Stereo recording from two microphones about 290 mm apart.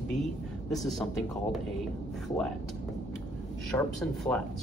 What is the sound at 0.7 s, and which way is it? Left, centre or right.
Speech, centre.